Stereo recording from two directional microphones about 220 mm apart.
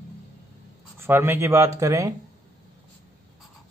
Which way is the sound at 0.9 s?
10° right (ahead or behind).